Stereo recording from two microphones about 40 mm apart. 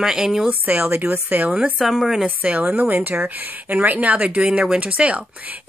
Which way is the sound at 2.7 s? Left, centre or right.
Right.